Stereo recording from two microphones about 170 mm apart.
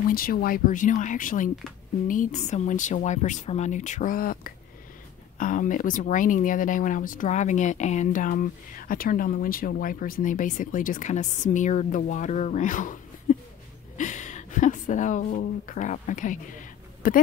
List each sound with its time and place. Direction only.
0.1 s speech: 60° left (ahead or behind)
13.9 s a sound: 45° left (ahead or behind)
15.2 s speech: 50° left (ahead or behind)